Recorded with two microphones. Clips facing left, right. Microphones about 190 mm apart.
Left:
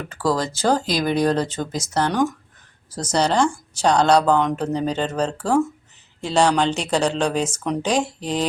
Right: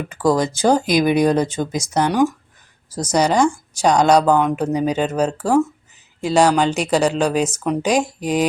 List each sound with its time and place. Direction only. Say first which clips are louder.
0.0 s speech: right 5 dB; 15° right (ahead or behind)